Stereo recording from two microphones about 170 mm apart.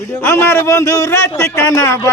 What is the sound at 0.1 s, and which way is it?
Speech, 15° left (ahead or behind).